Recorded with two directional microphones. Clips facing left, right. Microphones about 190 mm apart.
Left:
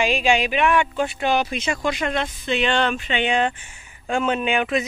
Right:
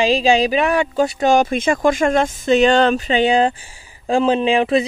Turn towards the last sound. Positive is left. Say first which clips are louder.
# right 6 dB
turn(degrees=-30)  # may be behind; listen again after turning